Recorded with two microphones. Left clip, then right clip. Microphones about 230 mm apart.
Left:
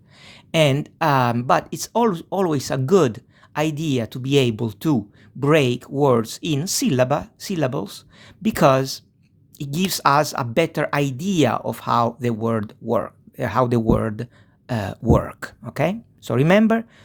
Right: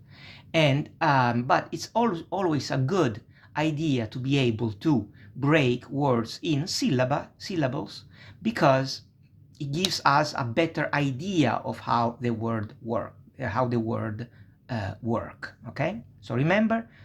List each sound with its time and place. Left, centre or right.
0.2 s speech: left